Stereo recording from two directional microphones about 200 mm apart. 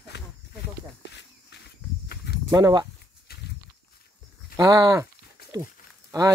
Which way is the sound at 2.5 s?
20° right (ahead or behind).